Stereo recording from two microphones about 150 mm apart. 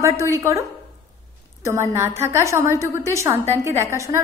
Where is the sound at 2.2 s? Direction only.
20° right (ahead or behind).